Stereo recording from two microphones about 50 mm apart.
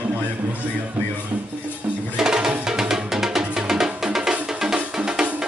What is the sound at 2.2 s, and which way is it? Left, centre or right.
Music, centre.